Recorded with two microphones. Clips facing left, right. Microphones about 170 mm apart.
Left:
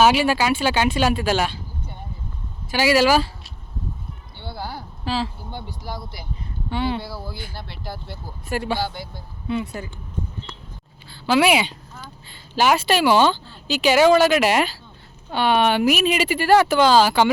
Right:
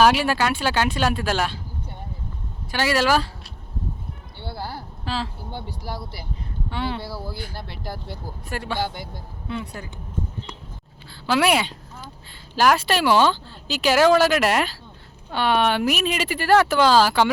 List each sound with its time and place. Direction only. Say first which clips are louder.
0.0 s a woman's voice: left 1 dB; centre (ahead or behind)
2.7 s speech: left 3 dB; 5° left (ahead or behind)
4.5 s speech: left 1 dB; 5° right (ahead or behind)
5.5 s a woman's voice: even; 10° right (ahead or behind)
7.5 s speech: right 1 dB; 45° right (ahead or behind)
8.1 s a woman's voice: left 4 dB; 5° left (ahead or behind)
11.1 s a woman's voice: left 2 dB; centre (ahead or behind)